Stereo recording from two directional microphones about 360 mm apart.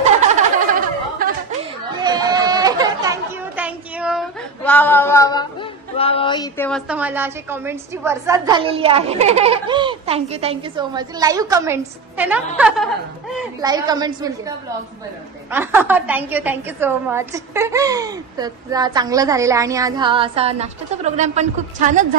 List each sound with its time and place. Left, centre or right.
0.6 s a sound: right
2.0 s speech: centre
15.5 s a woman's voice: centre